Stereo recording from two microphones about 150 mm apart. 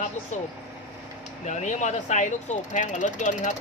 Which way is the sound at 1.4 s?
55° left (ahead or behind).